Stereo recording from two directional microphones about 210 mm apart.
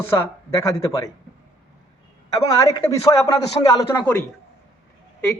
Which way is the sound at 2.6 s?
15° left (ahead or behind).